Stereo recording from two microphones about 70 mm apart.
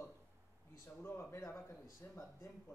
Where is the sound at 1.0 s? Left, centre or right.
Left.